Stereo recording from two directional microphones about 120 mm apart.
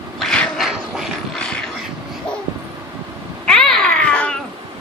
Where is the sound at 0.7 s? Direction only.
5° right (ahead or behind).